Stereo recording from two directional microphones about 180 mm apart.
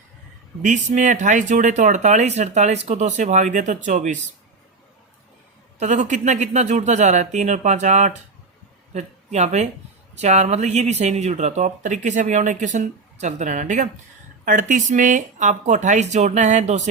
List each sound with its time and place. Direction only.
0.6 s speech: 45° right (ahead or behind)
5.8 s speech: 40° right (ahead or behind)